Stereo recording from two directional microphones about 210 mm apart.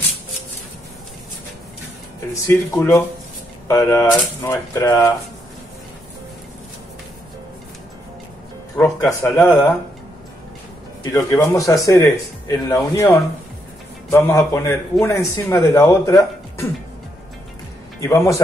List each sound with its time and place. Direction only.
2.4 s a man's voice: 15° left (ahead or behind)
8.7 s a man's voice: 15° left (ahead or behind)
11.1 s a man's voice: 15° left (ahead or behind)
18.0 s a man's voice: 15° left (ahead or behind)